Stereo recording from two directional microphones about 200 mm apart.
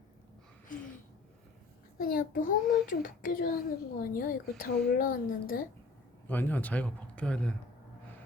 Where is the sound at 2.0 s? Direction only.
45° left (ahead or behind).